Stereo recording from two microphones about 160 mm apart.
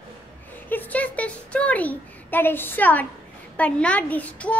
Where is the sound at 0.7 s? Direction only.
10° left (ahead or behind).